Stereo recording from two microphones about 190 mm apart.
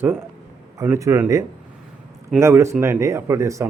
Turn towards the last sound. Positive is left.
turn(degrees=-15)  # may be behind; listen again after turning